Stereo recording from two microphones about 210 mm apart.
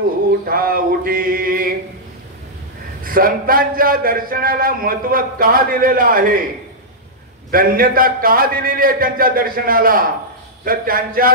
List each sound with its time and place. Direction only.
0.5 s music: 45° right (ahead or behind)
3.0 s a man's voice: 45° right (ahead or behind)
7.5 s a man's voice: 45° right (ahead or behind)